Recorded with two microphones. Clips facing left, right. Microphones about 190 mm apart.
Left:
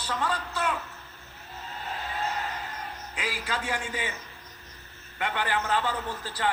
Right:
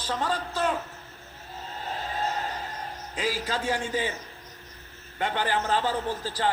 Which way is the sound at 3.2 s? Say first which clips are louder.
Right 4 dB; 35° right (ahead or behind).